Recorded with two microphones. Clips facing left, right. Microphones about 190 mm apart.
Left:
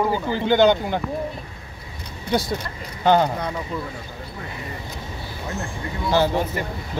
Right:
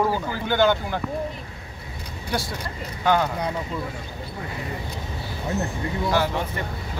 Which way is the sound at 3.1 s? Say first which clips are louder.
Left 4 dB; 30° left (ahead or behind).